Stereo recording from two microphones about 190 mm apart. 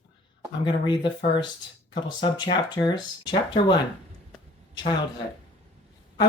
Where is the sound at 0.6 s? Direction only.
25° left (ahead or behind).